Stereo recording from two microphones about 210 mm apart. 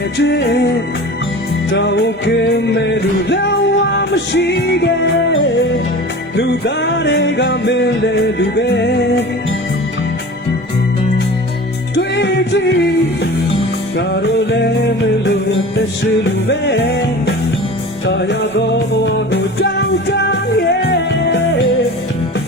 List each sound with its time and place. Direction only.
0.2 s music: 55° left (ahead or behind)
1.7 s music: 55° left (ahead or behind)
11.9 s music: 55° left (ahead or behind)
13.9 s music: 50° left (ahead or behind)
16.5 s music: 55° left (ahead or behind)